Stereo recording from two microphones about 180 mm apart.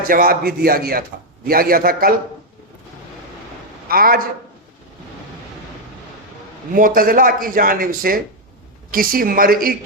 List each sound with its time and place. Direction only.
0.0 s speech: 55° right (ahead or behind)
3.8 s speech: 55° right (ahead or behind)
6.7 s speech: 50° right (ahead or behind)